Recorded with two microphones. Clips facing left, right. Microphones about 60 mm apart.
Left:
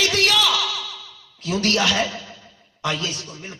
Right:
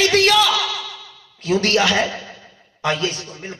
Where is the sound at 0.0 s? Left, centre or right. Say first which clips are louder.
Right 5 dB; right.